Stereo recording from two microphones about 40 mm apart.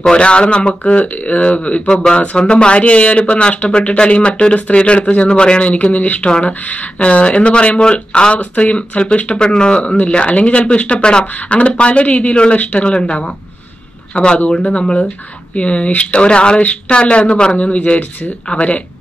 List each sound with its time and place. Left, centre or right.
0.1 s speech: left
1.9 s speech: left
9.4 s speech: left
17.6 s speech: left